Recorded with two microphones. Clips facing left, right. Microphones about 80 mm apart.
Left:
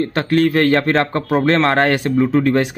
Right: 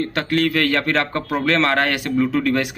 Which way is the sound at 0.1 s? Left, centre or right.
Left.